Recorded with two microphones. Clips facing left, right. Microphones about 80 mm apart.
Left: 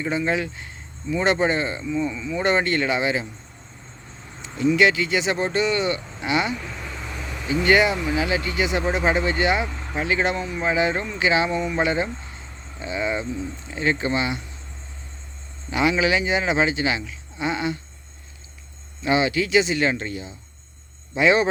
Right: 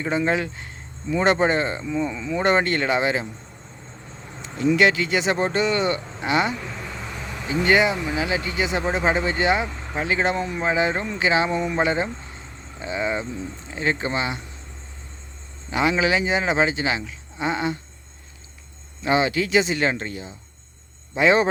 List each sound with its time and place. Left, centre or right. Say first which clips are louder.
0.0 s speech: right 1 dB; right
4.4 s speech: even; right
7.4 s speech: left 1 dB; right
15.7 s speech: even; right
19.0 s speech: even; right